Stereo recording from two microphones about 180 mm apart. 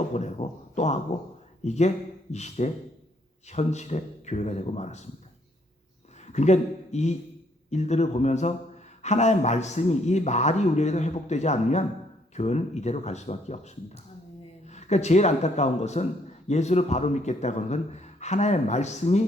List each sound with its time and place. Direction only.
0.1 s a man's voice: 40° left (ahead or behind)
6.2 s a man's voice: 40° left (ahead or behind)